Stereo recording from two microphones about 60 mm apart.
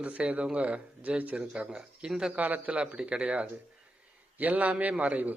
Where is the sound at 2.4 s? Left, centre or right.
Right.